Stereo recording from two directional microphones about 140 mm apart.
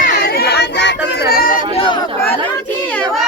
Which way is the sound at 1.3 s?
90° left.